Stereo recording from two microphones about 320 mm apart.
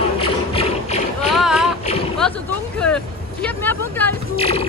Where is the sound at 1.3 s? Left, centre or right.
Centre.